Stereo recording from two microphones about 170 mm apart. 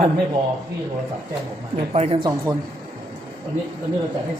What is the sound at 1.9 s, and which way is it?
Speech, 40° right (ahead or behind).